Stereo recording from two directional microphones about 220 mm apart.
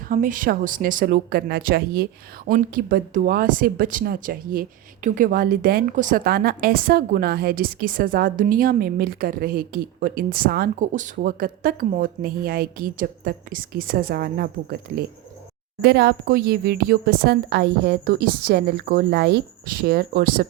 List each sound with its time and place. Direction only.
0.1 s a woman's voice: 40° right (ahead or behind)